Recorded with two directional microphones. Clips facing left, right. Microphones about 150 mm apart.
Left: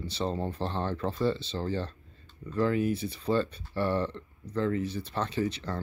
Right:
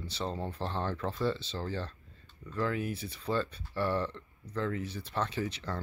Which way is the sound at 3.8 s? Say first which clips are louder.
Left 3 dB; 20° left (ahead or behind).